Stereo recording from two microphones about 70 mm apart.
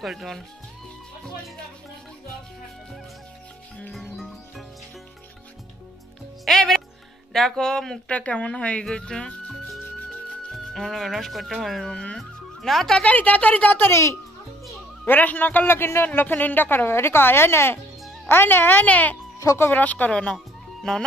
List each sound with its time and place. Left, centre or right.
0.0 s speech: centre
3.9 s music: centre
6.4 s music: centre
7.3 s speech: centre
8.1 s speech: centre
13.0 s a woman's voice: left
15.0 s a woman's voice: left
20.3 s music: centre